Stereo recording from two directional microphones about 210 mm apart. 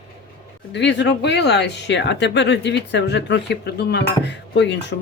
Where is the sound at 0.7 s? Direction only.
55° left (ahead or behind).